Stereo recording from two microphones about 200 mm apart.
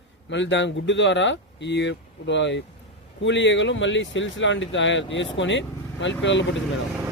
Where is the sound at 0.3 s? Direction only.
65° left (ahead or behind).